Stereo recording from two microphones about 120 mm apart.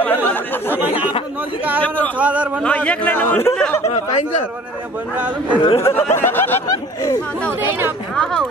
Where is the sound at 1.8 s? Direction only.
10° left (ahead or behind).